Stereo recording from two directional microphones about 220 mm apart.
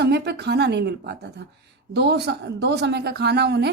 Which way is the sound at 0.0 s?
50° right (ahead or behind).